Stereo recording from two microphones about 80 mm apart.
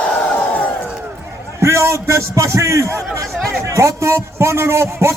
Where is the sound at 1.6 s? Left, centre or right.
Right.